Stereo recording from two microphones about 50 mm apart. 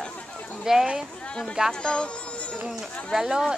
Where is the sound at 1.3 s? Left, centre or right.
Centre.